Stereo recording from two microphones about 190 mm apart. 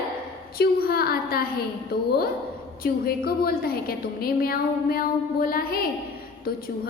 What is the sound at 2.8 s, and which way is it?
A woman's voice, 50° left (ahead or behind).